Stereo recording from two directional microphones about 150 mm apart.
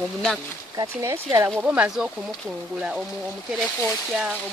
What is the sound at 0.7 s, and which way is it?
Speech, 20° right (ahead or behind).